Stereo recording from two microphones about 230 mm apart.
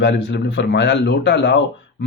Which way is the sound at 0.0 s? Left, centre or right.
Left.